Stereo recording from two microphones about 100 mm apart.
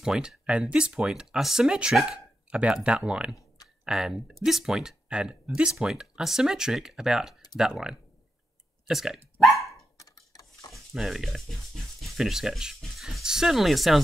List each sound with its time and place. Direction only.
0.0 s speech: 5° right (ahead or behind)
9.9 s clock: 35° left (ahead or behind)
10.7 s speech: centre (ahead or behind)